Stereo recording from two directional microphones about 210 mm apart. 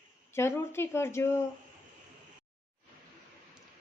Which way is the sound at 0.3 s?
10° left (ahead or behind).